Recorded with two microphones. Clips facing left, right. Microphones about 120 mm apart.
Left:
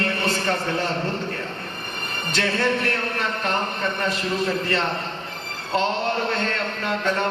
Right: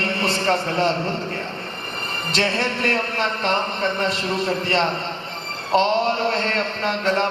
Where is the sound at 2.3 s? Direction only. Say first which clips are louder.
Even; 30° right (ahead or behind).